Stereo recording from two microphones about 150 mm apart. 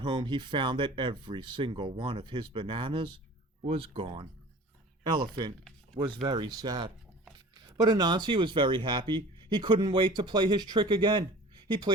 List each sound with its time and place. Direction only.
0.0 s speech: 30° right (ahead or behind)